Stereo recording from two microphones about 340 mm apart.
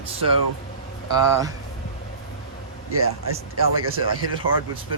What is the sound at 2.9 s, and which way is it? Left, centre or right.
Speech, right.